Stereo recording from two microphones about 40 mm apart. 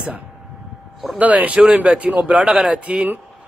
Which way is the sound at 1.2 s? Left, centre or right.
Right.